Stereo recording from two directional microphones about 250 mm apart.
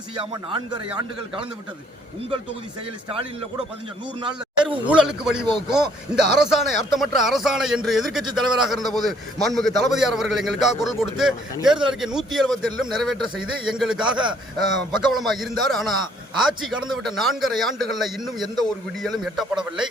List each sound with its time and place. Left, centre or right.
0.2 s speech: centre
4.2 s a sound: centre
4.6 s speech: centre
17.0 s speech: centre